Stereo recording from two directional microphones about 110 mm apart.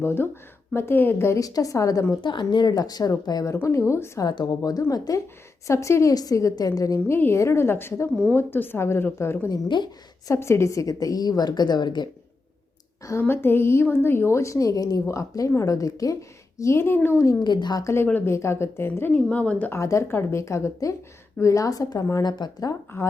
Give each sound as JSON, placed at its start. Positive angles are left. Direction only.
{"t": 0.0, "sound": "a woman's voice", "side_deg": 20}
{"t": 2.2, "sound": "a woman's voice", "side_deg": 45}
{"t": 4.3, "sound": "a woman's voice", "side_deg": 35}
{"t": 9.5, "sound": "speech", "side_deg": 40}
{"t": 10.2, "sound": "a woman's voice", "side_deg": 25}
{"t": 13.1, "sound": "a woman's voice", "side_deg": 20}
{"t": 17.4, "sound": "a woman's voice", "side_deg": 40}
{"t": 17.8, "sound": "a woman's voice", "side_deg": 20}
{"t": 19.8, "sound": "a woman's voice", "side_deg": 25}